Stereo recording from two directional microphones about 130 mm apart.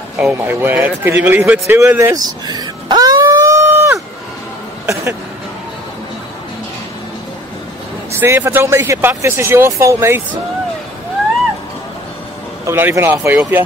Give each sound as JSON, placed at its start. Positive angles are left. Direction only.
{"t": 0.2, "sound": "a man's voice", "side_deg": -15}
{"t": 2.1, "sound": "a sound", "side_deg": -30}
{"t": 8.1, "sound": "speech", "side_deg": -20}
{"t": 12.6, "sound": "a man's voice", "side_deg": -20}